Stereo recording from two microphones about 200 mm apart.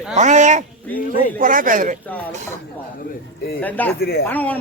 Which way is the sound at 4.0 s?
50° left (ahead or behind).